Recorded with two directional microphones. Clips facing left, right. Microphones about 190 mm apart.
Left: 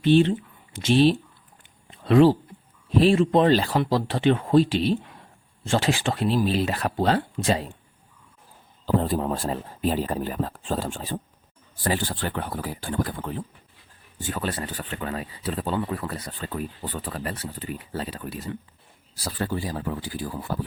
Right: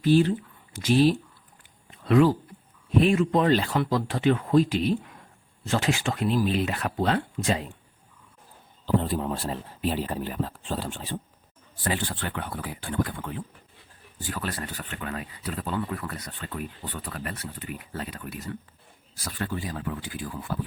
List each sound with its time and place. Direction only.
0.0 s speech: 25° left (ahead or behind)
1.9 s a sound: 30° left (ahead or behind)
2.9 s speech: 30° left (ahead or behind)
9.0 s speech: 45° left (ahead or behind)
14.2 s speech: 25° left (ahead or behind)